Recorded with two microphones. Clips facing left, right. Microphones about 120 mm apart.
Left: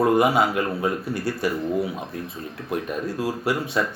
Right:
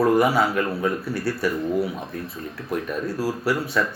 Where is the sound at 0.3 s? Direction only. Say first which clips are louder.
Even; 20° left (ahead or behind).